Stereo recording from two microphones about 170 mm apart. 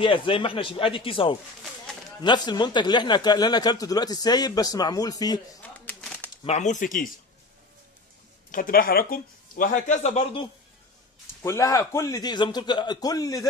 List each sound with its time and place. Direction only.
0.0 s speech: 30° left (ahead or behind)
5.6 s shuffling cards: 10° left (ahead or behind)
6.4 s speech: 40° left (ahead or behind)
8.5 s speech: 55° left (ahead or behind)
11.4 s speech: 20° left (ahead or behind)